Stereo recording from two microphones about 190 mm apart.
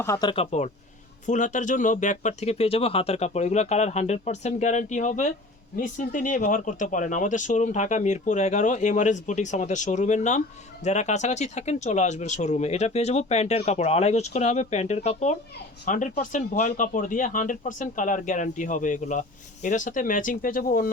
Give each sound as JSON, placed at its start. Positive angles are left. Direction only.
{"t": 0.0, "sound": "speech", "side_deg": 20}
{"t": 1.3, "sound": "speech", "side_deg": 40}